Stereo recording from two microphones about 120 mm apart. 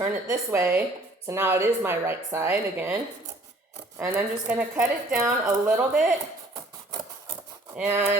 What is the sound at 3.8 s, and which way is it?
Speech, 20° right (ahead or behind).